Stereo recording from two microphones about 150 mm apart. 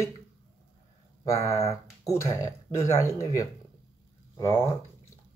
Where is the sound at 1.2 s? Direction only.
20° left (ahead or behind).